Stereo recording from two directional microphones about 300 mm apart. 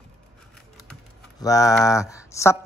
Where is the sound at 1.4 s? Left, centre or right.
Centre.